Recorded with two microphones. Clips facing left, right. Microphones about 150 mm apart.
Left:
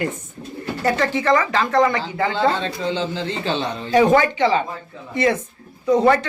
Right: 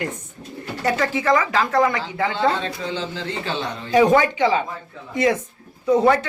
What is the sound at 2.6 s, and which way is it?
Speech, 25° left (ahead or behind).